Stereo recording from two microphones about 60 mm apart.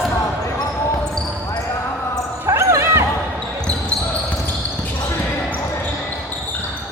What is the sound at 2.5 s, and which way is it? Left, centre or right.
Basketball bounce, right.